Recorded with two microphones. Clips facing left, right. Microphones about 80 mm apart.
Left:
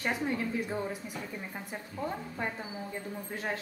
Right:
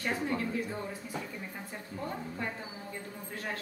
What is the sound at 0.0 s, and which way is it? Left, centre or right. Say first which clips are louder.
A woman's voice: left 1 dB; centre.